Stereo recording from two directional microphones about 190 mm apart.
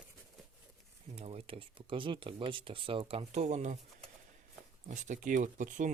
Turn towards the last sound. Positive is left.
turn(degrees=-40)  # may be behind; listen again after turning